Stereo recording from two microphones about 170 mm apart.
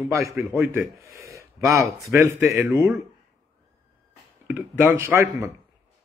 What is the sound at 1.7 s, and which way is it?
Speech, 15° right (ahead or behind).